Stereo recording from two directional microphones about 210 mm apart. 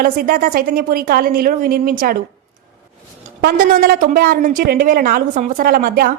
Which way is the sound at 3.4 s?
40° right (ahead or behind).